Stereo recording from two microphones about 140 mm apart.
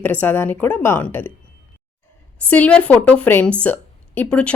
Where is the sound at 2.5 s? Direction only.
10° left (ahead or behind).